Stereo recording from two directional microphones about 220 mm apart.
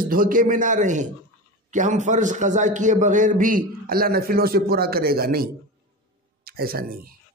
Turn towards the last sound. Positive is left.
turn(degrees=-40)  # may be behind; listen again after turning